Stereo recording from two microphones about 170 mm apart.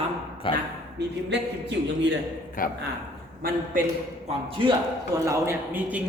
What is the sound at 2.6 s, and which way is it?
Speech, 55° left (ahead or behind).